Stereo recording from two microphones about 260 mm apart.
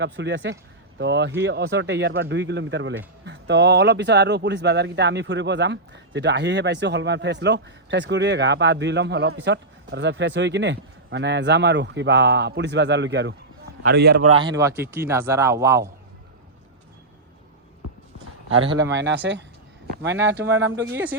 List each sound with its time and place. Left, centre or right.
0.0 s speech: right
14.3 s speech: centre
18.6 s speech: centre
18.9 s speech: right
20.9 s speech: centre